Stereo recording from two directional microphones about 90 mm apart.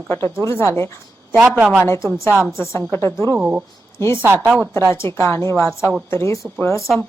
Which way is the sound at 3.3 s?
10° right (ahead or behind).